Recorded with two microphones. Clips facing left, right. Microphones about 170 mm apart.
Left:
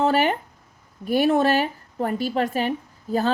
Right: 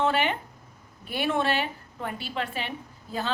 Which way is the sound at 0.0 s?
40° left (ahead or behind).